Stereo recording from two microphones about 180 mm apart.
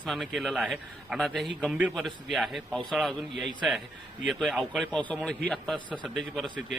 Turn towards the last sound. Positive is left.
turn(degrees=0)  # may be behind; listen again after turning